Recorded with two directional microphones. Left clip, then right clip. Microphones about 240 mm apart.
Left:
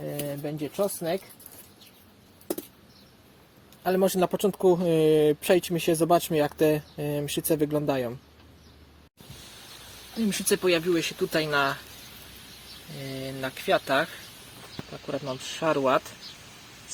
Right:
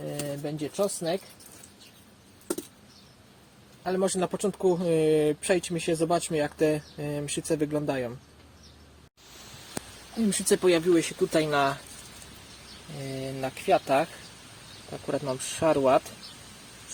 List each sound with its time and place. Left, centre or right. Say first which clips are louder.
0.4 s speech: even; centre
3.8 s speech: left 4 dB; left
10.2 s speech: right 1 dB; centre
13.0 s speech: right 1 dB; centre